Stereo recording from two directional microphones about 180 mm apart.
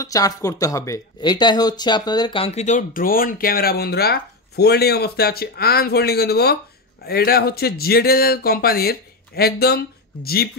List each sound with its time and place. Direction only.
0.0 s speech: 20° left (ahead or behind); by 10.6 s 60° left (ahead or behind)